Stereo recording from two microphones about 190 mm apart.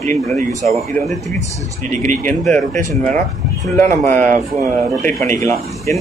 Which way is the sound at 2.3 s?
5° left (ahead or behind).